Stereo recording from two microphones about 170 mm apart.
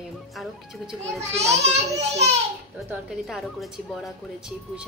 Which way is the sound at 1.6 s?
40° right (ahead or behind).